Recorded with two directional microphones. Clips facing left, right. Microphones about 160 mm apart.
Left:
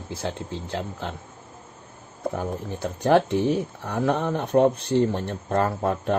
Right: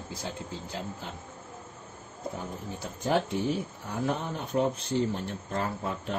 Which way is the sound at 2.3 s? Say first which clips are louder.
Left 8 dB; 70° left (ahead or behind).